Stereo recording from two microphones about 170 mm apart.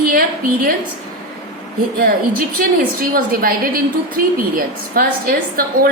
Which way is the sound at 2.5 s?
55° right (ahead or behind).